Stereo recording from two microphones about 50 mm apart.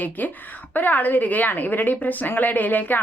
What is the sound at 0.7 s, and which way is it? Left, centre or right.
Speech, left.